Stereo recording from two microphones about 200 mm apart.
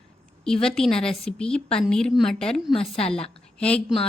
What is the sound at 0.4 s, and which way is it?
Speech, 5° left (ahead or behind).